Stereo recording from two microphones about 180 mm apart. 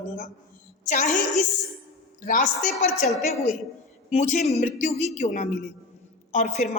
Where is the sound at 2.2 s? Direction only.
45° left (ahead or behind).